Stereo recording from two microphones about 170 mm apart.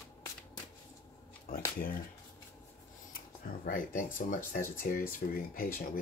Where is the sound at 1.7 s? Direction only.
55° left (ahead or behind).